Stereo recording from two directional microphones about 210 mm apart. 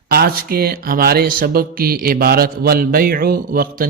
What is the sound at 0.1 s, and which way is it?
Speech, 45° right (ahead or behind).